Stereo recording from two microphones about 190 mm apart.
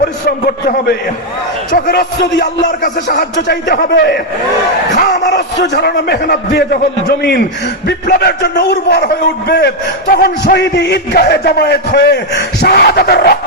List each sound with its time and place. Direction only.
0.3 s a man's voice: 55° left (ahead or behind)
5.3 s a man's voice: 65° left (ahead or behind)
10.4 s a man's voice: 65° left (ahead or behind)